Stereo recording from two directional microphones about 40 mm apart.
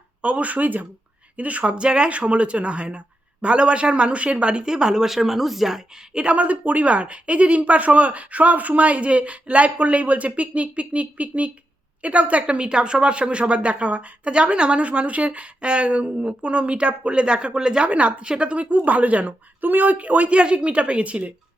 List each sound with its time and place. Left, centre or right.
0.2 s speech: right
4.6 s speech: centre
6.2 s speech: right
17.8 s speech: right